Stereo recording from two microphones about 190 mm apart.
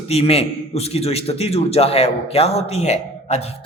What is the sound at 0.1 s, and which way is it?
A man's voice, 30° left (ahead or behind).